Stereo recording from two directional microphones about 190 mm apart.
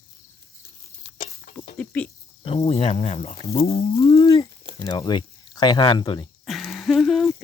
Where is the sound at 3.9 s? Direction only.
30° left (ahead or behind).